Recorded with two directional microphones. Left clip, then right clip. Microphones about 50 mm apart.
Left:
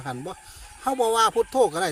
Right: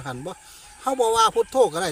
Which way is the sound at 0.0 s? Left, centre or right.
Left.